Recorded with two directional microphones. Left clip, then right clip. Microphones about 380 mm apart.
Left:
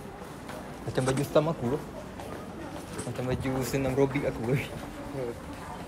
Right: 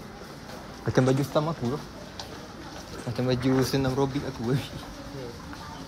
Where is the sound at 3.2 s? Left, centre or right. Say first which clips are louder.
Right 7 dB; centre.